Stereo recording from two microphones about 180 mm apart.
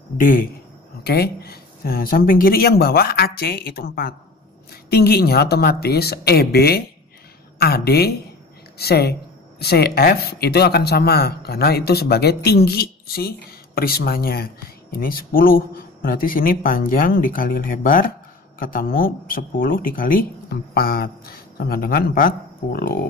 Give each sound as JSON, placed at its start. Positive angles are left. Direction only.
{"t": 0.2, "sound": "speech", "side_deg": 50}